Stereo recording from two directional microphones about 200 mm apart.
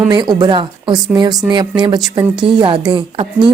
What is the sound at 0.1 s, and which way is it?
A woman's voice, 20° right (ahead or behind).